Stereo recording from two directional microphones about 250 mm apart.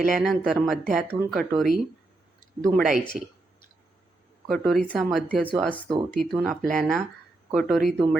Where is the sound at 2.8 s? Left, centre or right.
Centre.